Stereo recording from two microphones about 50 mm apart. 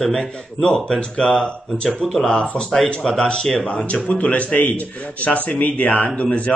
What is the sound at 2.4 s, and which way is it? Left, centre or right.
Speech, centre.